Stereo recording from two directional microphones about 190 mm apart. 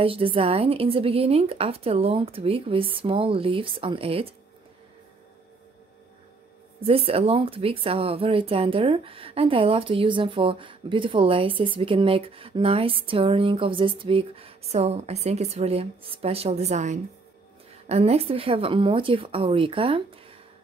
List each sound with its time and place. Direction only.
0.0 s speech: 30° right (ahead or behind)
6.9 s speech: 30° right (ahead or behind)